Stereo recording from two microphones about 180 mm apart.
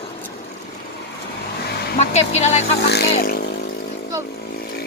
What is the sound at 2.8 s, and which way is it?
Speech, 65° left (ahead or behind).